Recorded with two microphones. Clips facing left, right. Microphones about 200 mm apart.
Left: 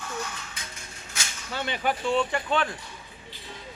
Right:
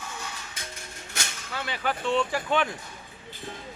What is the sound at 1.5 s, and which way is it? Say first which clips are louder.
Speech: left 3 dB; 25° left (ahead or behind).